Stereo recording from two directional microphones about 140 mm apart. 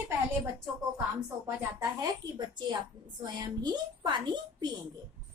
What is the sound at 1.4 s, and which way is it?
Speech, 20° right (ahead or behind).